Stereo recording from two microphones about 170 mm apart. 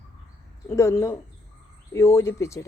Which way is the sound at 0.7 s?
15° left (ahead or behind).